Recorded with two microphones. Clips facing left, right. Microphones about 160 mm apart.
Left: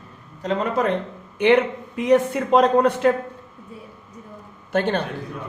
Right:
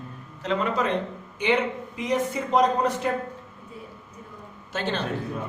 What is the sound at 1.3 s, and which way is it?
A man's voice, 60° left (ahead or behind).